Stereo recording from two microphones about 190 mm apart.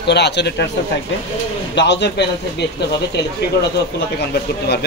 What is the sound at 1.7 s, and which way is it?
A man's voice, 65° left (ahead or behind).